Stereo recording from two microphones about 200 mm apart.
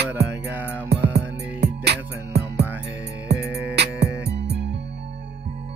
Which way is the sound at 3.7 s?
55° right (ahead or behind).